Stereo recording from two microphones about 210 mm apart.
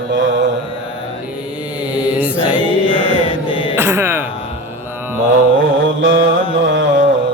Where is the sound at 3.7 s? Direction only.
10° right (ahead or behind).